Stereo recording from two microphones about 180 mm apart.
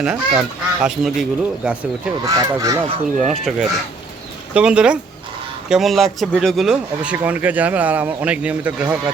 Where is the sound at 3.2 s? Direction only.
Centre (ahead or behind).